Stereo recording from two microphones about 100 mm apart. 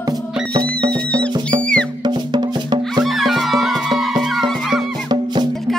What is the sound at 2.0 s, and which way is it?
Music, 45° right (ahead or behind).